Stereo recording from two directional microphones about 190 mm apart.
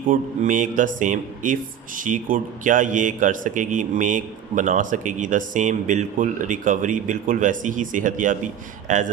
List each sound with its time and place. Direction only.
0.1 s a man's voice: 45° right (ahead or behind)